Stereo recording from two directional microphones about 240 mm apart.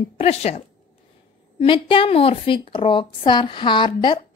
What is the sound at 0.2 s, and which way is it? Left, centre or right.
A woman's voice, left.